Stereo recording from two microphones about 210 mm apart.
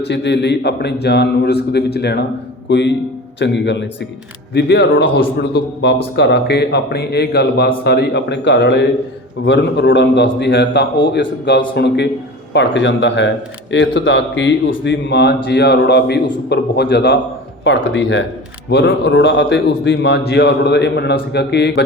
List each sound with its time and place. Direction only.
0.0 s a man's voice: 55° left (ahead or behind)